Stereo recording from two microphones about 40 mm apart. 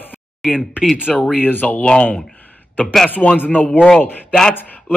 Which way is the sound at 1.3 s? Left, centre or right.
Left.